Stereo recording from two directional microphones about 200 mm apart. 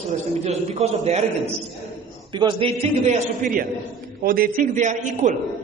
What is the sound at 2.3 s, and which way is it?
A man's voice, 25° right (ahead or behind).